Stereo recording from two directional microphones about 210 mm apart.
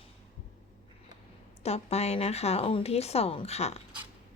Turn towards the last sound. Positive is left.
turn(degrees=30)  # may be behind; listen again after turning